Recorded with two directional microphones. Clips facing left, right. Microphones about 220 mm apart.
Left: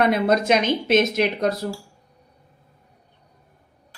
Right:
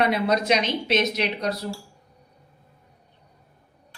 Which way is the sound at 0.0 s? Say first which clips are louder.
Left 3 dB; 50° left (ahead or behind).